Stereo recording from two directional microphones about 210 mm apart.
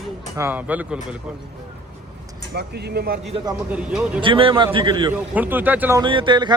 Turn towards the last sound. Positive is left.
turn(degrees=-20)  # may be behind; listen again after turning